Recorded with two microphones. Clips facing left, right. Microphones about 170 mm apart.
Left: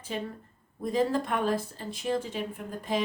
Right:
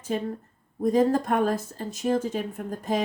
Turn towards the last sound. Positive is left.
turn(degrees=-45)  # may be behind; listen again after turning